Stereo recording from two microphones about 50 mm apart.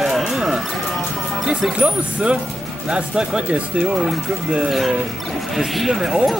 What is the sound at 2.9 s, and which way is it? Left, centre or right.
Speech, centre.